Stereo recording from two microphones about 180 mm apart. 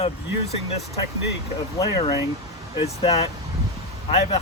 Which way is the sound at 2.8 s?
35° left (ahead or behind).